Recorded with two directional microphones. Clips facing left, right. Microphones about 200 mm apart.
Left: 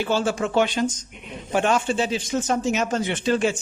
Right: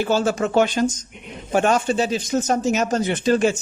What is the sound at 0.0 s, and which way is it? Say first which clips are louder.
A man's voice: right 3 dB; 40° right (ahead or behind).